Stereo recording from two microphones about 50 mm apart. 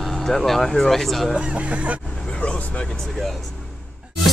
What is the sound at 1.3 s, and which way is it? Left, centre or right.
Speech, right.